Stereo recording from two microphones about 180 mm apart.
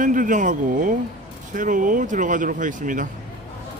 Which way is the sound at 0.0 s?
45° right (ahead or behind).